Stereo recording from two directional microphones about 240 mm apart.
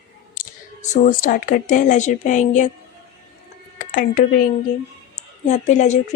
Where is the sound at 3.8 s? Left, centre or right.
Left.